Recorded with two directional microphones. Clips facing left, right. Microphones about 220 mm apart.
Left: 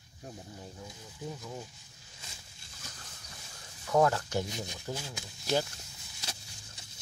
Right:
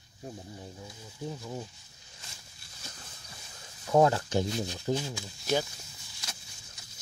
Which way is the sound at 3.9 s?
20° right (ahead or behind).